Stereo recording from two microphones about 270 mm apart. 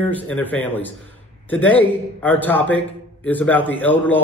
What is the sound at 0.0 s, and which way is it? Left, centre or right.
A man's voice, centre.